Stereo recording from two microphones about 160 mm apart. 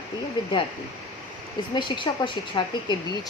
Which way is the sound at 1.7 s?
30° left (ahead or behind).